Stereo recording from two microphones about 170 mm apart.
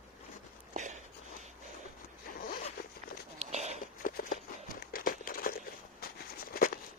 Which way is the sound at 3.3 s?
40° right (ahead or behind).